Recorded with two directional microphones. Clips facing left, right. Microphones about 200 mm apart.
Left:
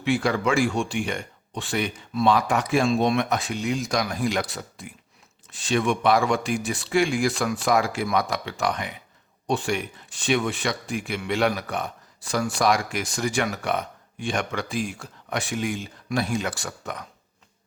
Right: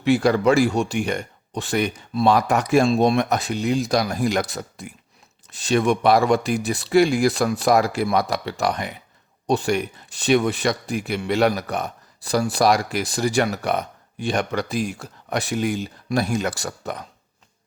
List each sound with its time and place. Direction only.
0.0 s speech: 40° right (ahead or behind)